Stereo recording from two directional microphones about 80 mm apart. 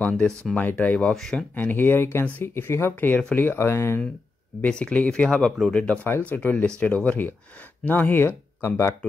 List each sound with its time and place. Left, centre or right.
0.0 s speech: centre
1.1 s speech: centre
1.5 s speech: left
4.6 s speech: centre
6.0 s speech: left